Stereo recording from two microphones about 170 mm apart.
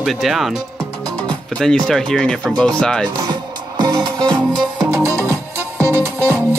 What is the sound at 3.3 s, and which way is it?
Music, 25° right (ahead or behind).